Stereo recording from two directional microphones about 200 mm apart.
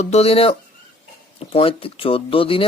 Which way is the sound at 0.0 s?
30° left (ahead or behind).